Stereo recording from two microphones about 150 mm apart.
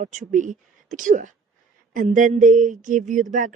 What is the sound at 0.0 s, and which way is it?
A woman's voice, 55° right (ahead or behind).